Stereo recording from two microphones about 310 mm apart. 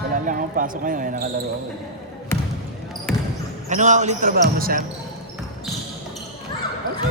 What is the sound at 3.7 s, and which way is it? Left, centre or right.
Speech, right.